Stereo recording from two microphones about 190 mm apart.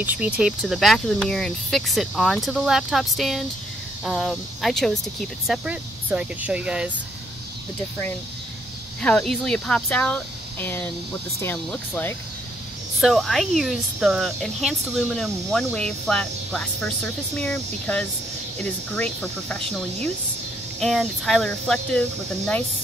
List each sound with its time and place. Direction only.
0.0 s speech: 5° right (ahead or behind)
9.0 s speech: 5° left (ahead or behind)
20.8 s speech: centre (ahead or behind)